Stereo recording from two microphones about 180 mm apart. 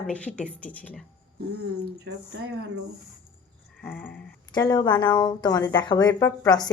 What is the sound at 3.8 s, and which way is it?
Speech, 10° left (ahead or behind).